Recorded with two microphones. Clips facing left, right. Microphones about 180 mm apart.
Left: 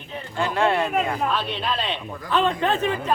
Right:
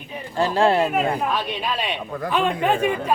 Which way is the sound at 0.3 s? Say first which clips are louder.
Right 3 dB; 30° right (ahead or behind).